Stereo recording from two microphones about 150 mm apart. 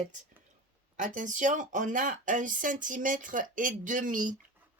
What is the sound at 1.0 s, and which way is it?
Speech, 60° right (ahead or behind).